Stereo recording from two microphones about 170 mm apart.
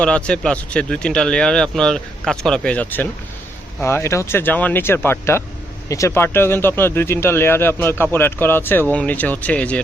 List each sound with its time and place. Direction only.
0.0 s speech: 5° left (ahead or behind)